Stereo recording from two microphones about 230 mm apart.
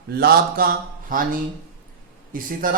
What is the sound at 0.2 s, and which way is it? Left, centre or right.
Speech, right.